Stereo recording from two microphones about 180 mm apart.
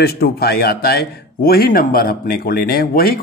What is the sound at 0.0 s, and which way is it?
Speech, 60° left (ahead or behind).